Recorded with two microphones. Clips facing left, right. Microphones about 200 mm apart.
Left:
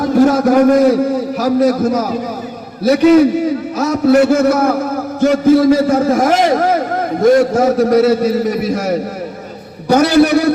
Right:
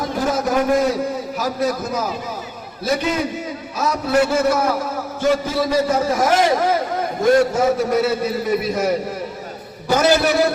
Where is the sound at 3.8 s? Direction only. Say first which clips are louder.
Left 7 dB; 50° left (ahead or behind).